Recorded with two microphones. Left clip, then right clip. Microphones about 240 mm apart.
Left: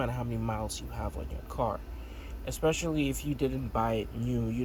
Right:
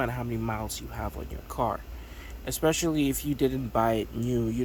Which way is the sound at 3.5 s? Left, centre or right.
Centre.